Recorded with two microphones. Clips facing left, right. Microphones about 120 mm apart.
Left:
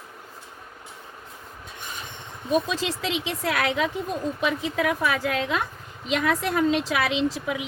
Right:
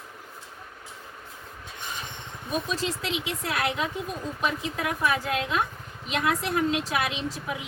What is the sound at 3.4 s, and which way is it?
A woman's voice, 90° left.